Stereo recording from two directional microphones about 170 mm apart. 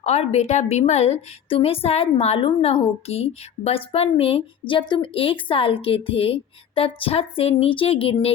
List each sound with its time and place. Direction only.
0.0 s a woman's voice: 40° left (ahead or behind)